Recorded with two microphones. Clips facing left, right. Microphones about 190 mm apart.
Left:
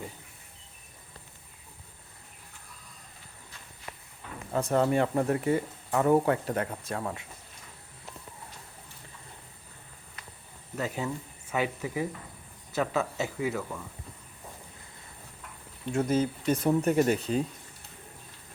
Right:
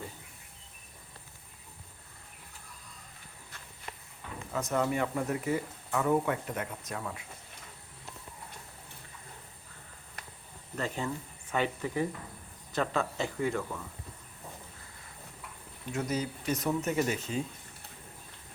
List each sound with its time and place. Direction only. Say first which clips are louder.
4.5 s speech: left 5 dB; 30° left (ahead or behind)
10.8 s speech: left 2 dB; 5° left (ahead or behind)
15.9 s speech: left 6 dB; 30° left (ahead or behind)
16.8 s speech: left 6 dB; 55° left (ahead or behind)